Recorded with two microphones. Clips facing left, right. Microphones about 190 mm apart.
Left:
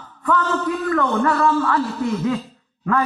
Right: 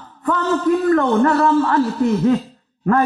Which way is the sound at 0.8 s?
40° right (ahead or behind).